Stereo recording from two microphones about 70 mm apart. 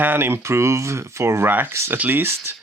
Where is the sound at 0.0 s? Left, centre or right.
Right.